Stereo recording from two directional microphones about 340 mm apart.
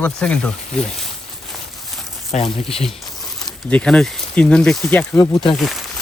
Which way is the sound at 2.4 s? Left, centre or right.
Centre.